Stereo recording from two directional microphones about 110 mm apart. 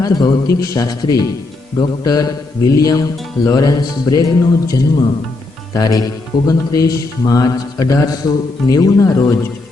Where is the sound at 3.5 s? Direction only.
35° left (ahead or behind).